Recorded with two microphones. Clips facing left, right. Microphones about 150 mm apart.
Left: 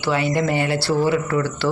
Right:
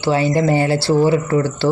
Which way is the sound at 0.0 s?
30° right (ahead or behind).